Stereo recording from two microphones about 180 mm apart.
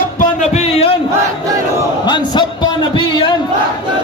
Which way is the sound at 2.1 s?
25° left (ahead or behind).